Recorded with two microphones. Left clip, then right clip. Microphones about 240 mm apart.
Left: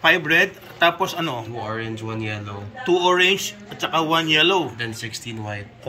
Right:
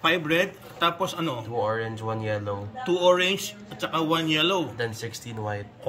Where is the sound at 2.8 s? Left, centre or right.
Centre.